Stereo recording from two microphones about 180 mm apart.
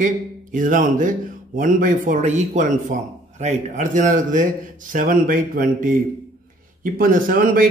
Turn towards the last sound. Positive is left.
turn(degrees=-50)  # may be behind; listen again after turning